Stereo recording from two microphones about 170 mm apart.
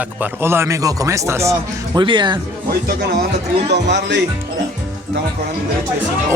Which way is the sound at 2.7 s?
65° right (ahead or behind).